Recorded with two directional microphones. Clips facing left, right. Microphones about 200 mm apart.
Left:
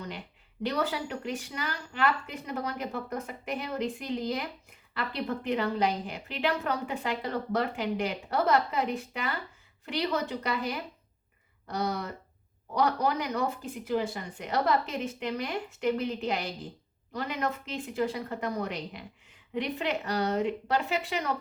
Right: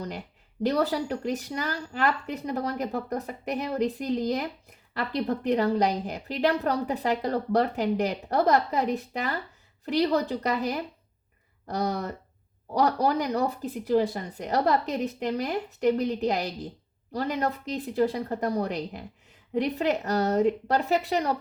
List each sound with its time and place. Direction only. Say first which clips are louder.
0.0 s a woman's voice: right 4 dB; 40° right (ahead or behind)